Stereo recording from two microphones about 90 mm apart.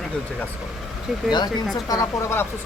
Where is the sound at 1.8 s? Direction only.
40° left (ahead or behind).